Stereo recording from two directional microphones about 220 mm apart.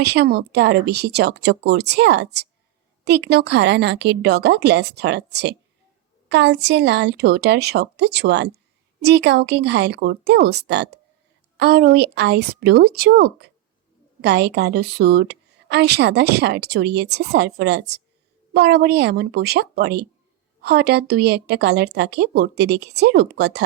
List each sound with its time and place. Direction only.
0.0 s a woman's voice: 50° right (ahead or behind)